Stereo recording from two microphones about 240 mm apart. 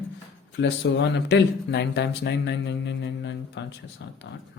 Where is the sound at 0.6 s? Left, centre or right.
Left.